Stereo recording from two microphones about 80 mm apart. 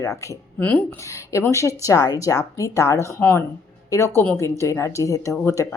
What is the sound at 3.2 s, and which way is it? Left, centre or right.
Speech, left.